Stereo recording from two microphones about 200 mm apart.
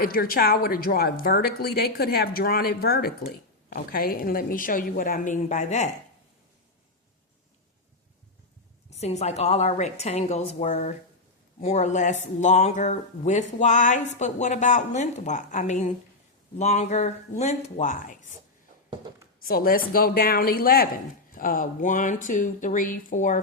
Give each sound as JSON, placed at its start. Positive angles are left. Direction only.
{"t": 0.0, "sound": "a woman's voice", "side_deg": 50}
{"t": 9.0, "sound": "speech", "side_deg": 35}
{"t": 19.4, "sound": "a woman's voice", "side_deg": 45}